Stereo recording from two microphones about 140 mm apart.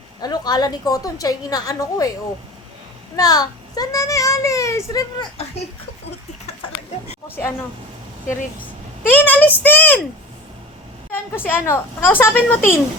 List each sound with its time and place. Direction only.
0.2 s a woman's voice: 30° left (ahead or behind)
3.2 s a woman's voice: 25° left (ahead or behind)
5.6 s a sound: 50° left (ahead or behind)
9.0 s a woman's voice: 15° left (ahead or behind)
11.4 s a woman's voice: 15° left (ahead or behind)